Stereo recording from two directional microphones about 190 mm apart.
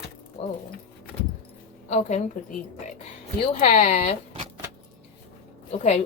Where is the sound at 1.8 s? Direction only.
35° left (ahead or behind).